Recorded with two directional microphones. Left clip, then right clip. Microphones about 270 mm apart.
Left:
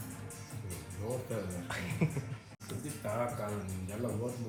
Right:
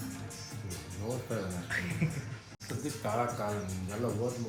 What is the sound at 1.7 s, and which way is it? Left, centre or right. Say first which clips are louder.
Speech: right 4 dB; centre.